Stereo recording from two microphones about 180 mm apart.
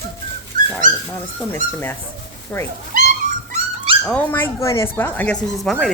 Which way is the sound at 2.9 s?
50° right (ahead or behind).